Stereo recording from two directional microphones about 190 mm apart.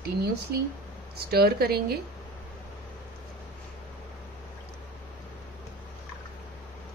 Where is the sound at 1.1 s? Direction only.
55° right (ahead or behind).